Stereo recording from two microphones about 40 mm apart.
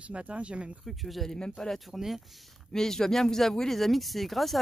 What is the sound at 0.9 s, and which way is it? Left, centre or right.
Speech, centre.